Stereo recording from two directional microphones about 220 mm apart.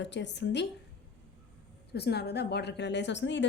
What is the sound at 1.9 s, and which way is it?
A woman's voice, 45° left (ahead or behind).